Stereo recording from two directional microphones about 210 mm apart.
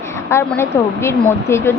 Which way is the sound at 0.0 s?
10° left (ahead or behind).